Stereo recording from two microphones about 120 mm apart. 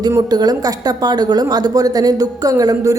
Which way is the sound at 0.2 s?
35° right (ahead or behind).